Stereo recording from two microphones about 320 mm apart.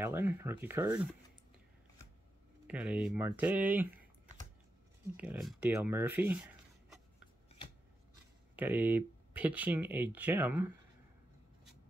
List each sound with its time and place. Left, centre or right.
0.0 s speech: centre
2.6 s speech: centre
5.1 s speech: centre
8.5 s speech: centre